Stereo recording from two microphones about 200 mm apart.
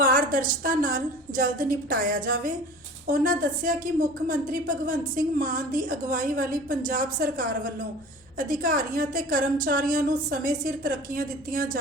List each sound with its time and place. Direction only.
0.0 s a woman's voice: 45° right (ahead or behind)